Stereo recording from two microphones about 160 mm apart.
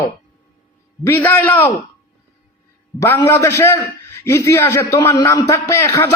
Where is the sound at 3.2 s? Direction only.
15° left (ahead or behind).